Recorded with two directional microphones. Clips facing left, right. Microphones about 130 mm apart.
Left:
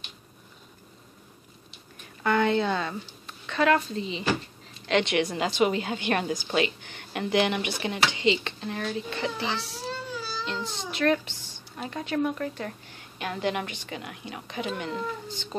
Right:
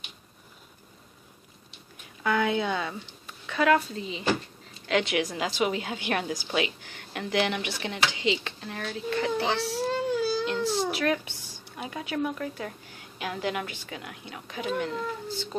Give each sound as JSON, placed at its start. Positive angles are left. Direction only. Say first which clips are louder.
{"t": 2.2, "sound": "a woman's voice", "louder": "left 2 dB", "side_deg": -5}
{"t": 9.4, "sound": "a child's voice", "louder": "right 4 dB", "side_deg": -60}
{"t": 9.8, "sound": "baby cry", "louder": "right 9 dB", "side_deg": -50}
{"t": 10.4, "sound": "speech", "louder": "right 7 dB", "side_deg": -5}